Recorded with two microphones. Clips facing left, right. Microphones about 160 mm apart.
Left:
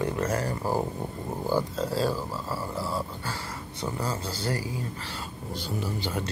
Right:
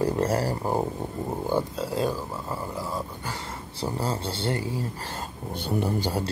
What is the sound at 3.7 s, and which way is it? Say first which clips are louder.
Speech: right 3 dB; 30° right (ahead or behind).